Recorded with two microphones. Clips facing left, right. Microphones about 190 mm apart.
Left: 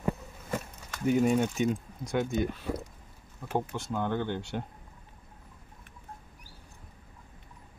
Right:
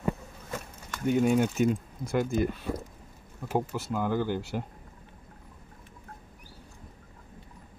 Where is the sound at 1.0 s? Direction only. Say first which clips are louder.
Right 1 dB; centre (ahead or behind).